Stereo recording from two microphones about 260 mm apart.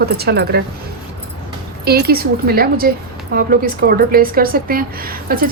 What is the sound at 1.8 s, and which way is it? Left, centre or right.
A woman's voice, right.